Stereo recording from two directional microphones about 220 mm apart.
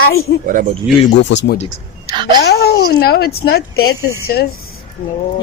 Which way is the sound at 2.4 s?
45° left (ahead or behind).